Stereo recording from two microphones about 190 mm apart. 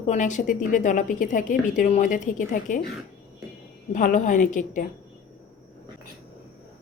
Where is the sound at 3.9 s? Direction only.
45° left (ahead or behind).